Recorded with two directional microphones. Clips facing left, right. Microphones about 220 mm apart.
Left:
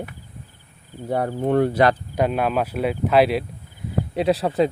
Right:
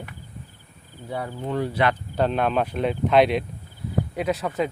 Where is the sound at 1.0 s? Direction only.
50° left (ahead or behind).